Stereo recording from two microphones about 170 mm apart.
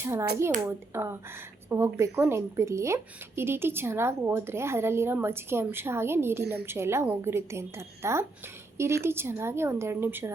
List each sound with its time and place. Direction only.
0.0 s speech: 15° right (ahead or behind)